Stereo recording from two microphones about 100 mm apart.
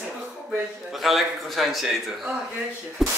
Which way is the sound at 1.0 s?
Centre (ahead or behind).